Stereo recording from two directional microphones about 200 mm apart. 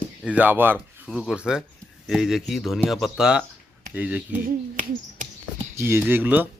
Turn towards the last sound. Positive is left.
turn(degrees=-10)  # may be behind; listen again after turning